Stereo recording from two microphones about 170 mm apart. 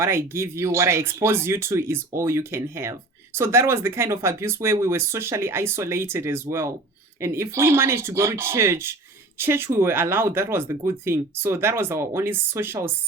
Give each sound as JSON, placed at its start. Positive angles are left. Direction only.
{"t": 0.0, "sound": "speech", "side_deg": -15}